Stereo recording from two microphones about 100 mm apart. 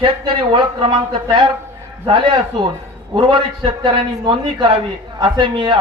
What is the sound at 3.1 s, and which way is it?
A man's voice, 50° right (ahead or behind).